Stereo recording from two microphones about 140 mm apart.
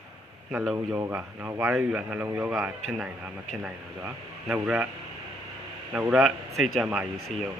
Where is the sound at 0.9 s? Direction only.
15° right (ahead or behind).